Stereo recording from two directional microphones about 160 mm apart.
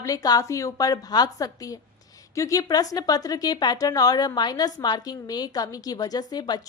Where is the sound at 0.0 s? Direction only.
20° left (ahead or behind).